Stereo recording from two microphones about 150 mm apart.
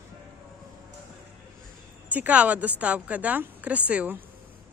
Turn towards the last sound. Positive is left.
turn(degrees=-10)  # may be behind; listen again after turning